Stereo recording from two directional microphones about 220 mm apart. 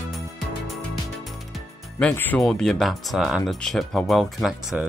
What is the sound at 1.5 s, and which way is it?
Speech, 5° left (ahead or behind).